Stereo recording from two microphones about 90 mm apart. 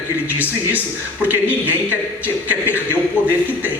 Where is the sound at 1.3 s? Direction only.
20° right (ahead or behind).